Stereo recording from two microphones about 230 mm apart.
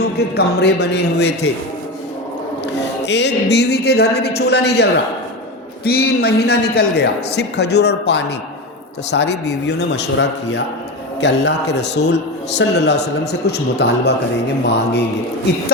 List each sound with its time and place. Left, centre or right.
0.3 s a man's voice: left
3.1 s a man's voice: left